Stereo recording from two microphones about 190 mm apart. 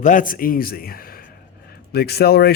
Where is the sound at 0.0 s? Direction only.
45° left (ahead or behind).